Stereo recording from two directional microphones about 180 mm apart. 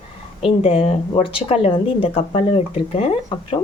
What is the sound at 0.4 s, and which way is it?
Speech, 35° left (ahead or behind).